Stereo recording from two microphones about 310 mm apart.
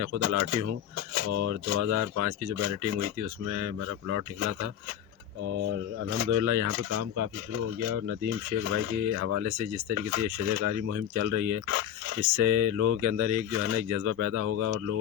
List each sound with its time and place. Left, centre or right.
0.2 s speech: right
6.3 s speech: right
14.4 s speech: right